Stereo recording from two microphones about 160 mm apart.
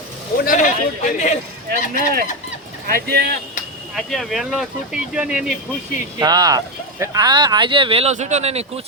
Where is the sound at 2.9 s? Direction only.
85° right.